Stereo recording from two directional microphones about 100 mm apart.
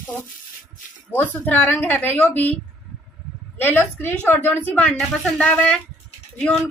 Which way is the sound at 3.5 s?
20° left (ahead or behind).